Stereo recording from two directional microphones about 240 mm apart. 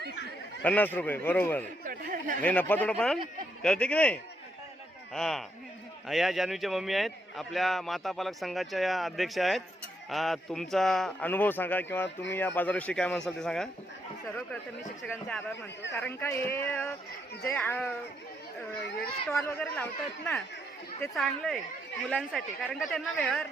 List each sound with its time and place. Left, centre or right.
0.6 s speech: centre
1.8 s a sound: right
2.4 s a man's voice: centre
15.0 s speech: centre
19.3 s a man's voice: centre